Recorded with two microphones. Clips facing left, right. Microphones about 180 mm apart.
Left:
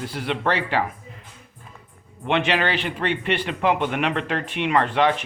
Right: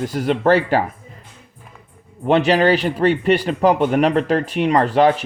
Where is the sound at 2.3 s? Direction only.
40° right (ahead or behind).